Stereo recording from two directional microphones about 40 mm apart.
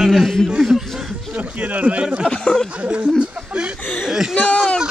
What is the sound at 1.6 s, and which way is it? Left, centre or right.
Speech, right.